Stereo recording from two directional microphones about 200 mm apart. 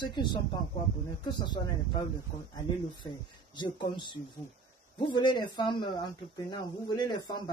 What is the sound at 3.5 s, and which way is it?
Speech, 20° left (ahead or behind).